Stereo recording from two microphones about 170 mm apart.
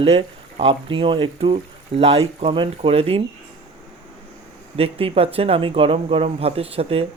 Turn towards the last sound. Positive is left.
turn(degrees=-35)  # may be behind; listen again after turning